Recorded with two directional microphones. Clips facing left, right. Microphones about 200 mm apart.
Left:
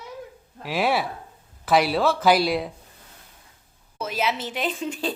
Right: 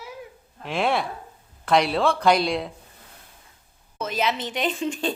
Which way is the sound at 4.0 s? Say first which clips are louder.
Right 1 dB; 10° left (ahead or behind).